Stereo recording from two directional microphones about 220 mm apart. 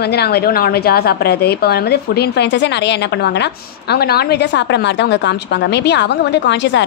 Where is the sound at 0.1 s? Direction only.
45° left (ahead or behind).